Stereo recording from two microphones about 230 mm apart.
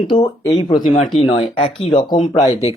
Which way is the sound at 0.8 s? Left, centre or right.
Left.